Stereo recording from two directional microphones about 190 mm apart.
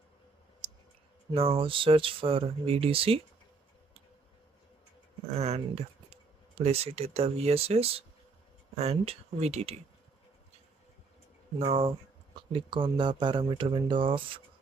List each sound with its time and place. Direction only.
1.3 s speech: 30° right (ahead or behind)
5.4 s speech: 35° right (ahead or behind)
11.6 s speech: 30° right (ahead or behind)